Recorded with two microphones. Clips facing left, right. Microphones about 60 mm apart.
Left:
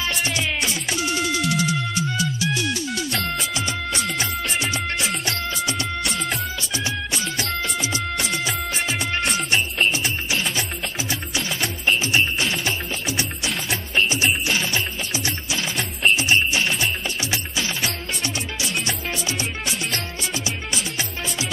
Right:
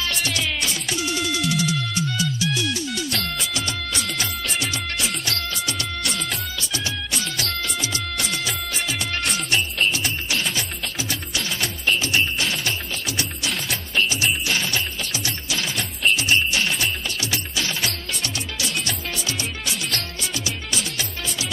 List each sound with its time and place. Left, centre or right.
0.0 s music: left
3.1 s music: centre
5.2 s music: left
8.2 s music: centre
9.9 s music: left
12.0 s music: left
13.7 s music: left
16.0 s music: left
18.2 s music: left